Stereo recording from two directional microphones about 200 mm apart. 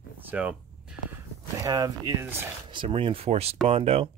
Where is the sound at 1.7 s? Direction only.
15° right (ahead or behind).